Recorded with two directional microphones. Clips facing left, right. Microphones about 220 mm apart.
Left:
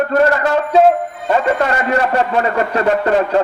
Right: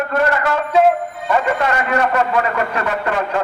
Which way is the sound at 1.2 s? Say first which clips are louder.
Left 3 dB; 35° left (ahead or behind).